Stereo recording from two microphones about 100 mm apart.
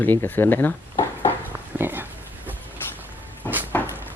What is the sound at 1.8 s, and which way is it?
Speech, 20° right (ahead or behind).